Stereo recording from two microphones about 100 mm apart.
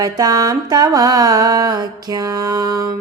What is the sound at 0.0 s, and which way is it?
Mantra, 40° right (ahead or behind).